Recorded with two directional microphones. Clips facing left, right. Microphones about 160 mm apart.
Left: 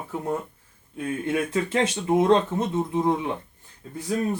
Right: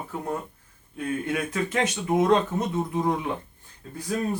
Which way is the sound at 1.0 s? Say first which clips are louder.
Left 2 dB; 25° left (ahead or behind).